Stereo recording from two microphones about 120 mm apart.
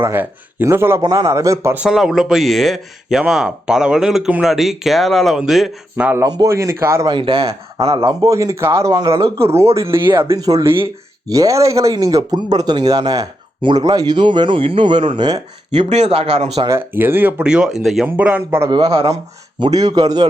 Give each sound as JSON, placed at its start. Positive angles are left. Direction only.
{"t": 0.0, "sound": "a man's voice", "side_deg": -20}
{"t": 1.7, "sound": "speech", "side_deg": -5}
{"t": 6.2, "sound": "a man's voice", "side_deg": -30}
{"t": 7.1, "sound": "speech", "side_deg": -45}
{"t": 8.0, "sound": "a man's voice", "side_deg": -25}
{"t": 9.6, "sound": "speech", "side_deg": -55}
{"t": 9.9, "sound": "a man's voice", "side_deg": -20}
{"t": 10.3, "sound": "speech", "side_deg": -30}
{"t": 15.7, "sound": "speech", "side_deg": -65}
{"t": 16.6, "sound": "speech", "side_deg": -20}
{"t": 18.7, "sound": "speech", "side_deg": -40}